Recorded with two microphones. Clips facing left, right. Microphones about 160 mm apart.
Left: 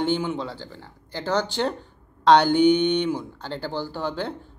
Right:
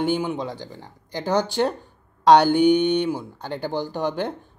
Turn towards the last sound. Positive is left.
turn(degrees=-15)  # may be behind; listen again after turning